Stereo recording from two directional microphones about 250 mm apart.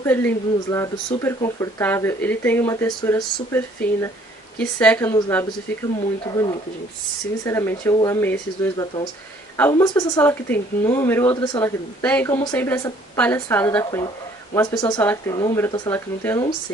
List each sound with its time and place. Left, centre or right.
0.0 s speech: centre